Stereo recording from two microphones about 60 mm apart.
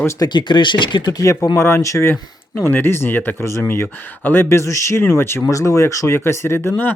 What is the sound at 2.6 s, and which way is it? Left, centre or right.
Speech, left.